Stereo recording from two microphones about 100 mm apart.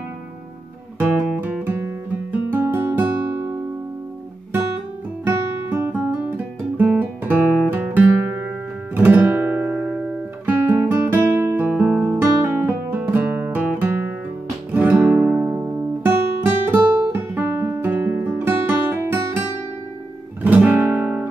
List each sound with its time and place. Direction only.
0.9 s music: 15° right (ahead or behind)
5.7 s guitar: 20° right (ahead or behind)
20.4 s guitar: 15° right (ahead or behind)